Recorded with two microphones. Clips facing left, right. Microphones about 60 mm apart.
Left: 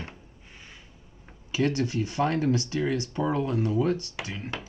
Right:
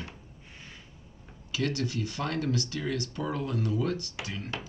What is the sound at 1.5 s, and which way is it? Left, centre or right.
Speech, left.